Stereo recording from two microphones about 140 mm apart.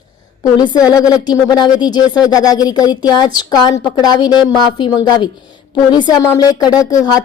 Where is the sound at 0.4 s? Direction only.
30° left (ahead or behind).